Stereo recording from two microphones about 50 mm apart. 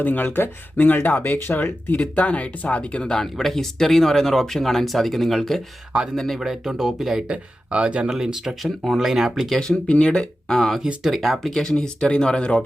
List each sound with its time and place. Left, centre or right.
0.0 s speech: left
3.0 s speech: centre
6.4 s speech: centre
7.3 s speech: right
8.1 s speech: centre
9.6 s speech: centre
11.1 s speech: centre
11.6 s speech: centre